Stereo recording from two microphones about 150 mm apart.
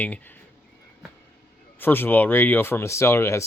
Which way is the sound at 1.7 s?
15° left (ahead or behind).